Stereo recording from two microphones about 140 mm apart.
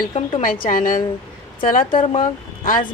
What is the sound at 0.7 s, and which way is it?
A woman's voice, 75° left (ahead or behind).